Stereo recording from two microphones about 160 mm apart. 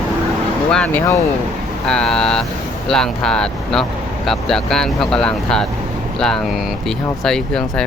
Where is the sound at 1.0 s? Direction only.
20° left (ahead or behind).